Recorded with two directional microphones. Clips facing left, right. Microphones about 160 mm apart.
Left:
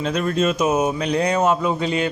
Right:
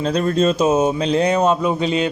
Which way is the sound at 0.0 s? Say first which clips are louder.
Right 3 dB; 35° right (ahead or behind).